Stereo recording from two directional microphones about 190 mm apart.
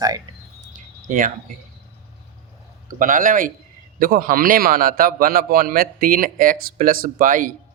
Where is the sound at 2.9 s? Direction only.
45° right (ahead or behind).